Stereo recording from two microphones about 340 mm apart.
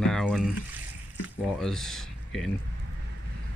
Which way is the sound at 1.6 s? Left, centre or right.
Centre.